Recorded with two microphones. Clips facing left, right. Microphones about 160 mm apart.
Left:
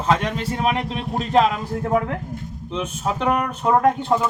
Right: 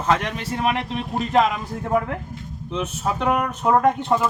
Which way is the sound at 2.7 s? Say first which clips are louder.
Even; 10° left (ahead or behind).